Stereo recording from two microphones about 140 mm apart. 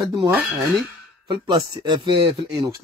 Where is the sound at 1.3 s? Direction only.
30° right (ahead or behind).